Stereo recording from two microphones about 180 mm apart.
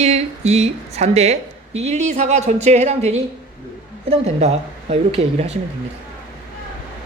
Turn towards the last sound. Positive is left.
turn(degrees=-40)  # may be behind; listen again after turning